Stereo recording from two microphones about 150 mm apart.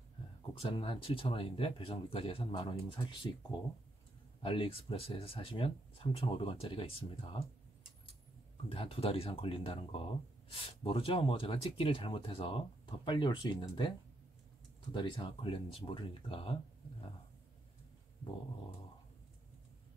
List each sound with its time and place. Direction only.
0.6 s speech: 40° left (ahead or behind)
4.4 s speech: 35° left (ahead or behind)
8.6 s speech: 40° left (ahead or behind)